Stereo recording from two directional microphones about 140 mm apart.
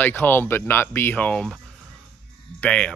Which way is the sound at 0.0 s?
15° left (ahead or behind).